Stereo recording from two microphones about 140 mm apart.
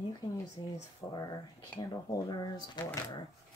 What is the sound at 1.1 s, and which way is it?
Speech, 25° left (ahead or behind).